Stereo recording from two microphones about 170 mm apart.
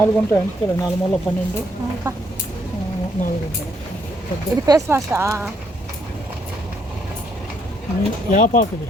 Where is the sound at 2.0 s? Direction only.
20° right (ahead or behind).